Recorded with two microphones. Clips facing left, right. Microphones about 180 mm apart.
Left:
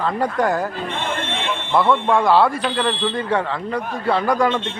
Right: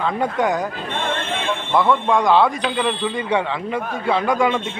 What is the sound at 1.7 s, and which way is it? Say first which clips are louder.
Speech: left 1 dB; 5° left (ahead or behind).